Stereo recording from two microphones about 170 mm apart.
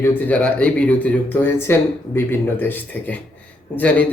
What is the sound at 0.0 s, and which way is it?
Speech, 10° left (ahead or behind).